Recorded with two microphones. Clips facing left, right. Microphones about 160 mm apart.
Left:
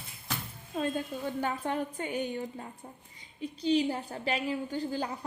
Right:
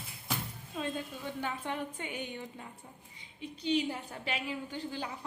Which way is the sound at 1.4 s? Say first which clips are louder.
Left 4 dB; 40° left (ahead or behind).